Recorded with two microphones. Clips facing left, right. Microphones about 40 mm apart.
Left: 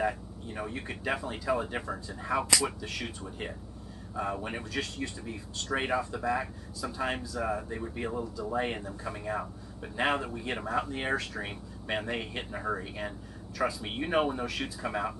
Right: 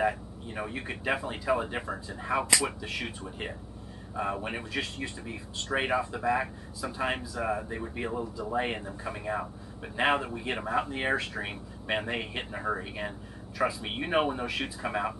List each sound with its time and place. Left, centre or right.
0.0 s speech: centre